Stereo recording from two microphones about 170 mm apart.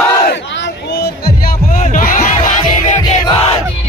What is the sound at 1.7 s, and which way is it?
Music, 50° left (ahead or behind).